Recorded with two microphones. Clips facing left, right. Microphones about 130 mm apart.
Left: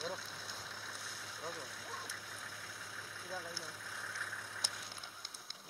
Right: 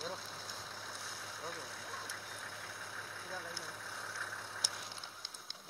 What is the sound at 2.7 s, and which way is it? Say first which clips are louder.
Vehicle: right 3 dB; 50° right (ahead or behind).